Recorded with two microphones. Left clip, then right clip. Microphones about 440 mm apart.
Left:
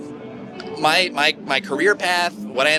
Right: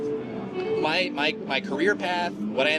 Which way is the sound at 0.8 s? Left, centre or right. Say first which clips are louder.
Left 9 dB; left.